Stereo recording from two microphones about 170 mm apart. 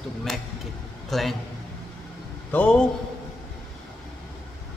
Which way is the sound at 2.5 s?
5° left (ahead or behind).